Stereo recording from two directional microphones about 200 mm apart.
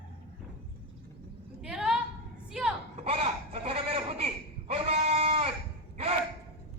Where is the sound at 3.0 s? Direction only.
30° right (ahead or behind).